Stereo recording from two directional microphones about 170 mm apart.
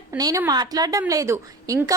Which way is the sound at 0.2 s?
20° right (ahead or behind).